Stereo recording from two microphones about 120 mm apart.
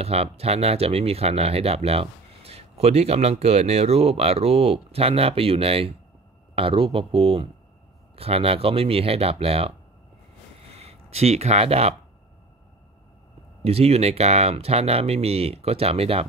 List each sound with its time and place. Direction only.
0.0 s speech: 60° right (ahead or behind)
10.8 s speech: 60° right (ahead or behind)
13.7 s speech: 60° right (ahead or behind)